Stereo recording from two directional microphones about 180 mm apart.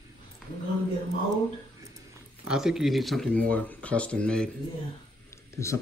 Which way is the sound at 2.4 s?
5° right (ahead or behind).